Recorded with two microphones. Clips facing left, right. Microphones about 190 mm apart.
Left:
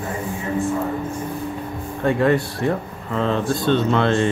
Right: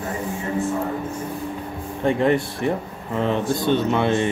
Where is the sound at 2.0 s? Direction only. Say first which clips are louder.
Left 1 dB; 20° right (ahead or behind).